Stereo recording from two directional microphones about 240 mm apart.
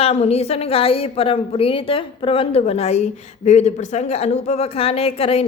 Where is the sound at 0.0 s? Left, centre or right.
Left.